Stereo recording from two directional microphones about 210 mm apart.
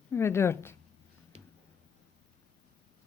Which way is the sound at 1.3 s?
30° right (ahead or behind).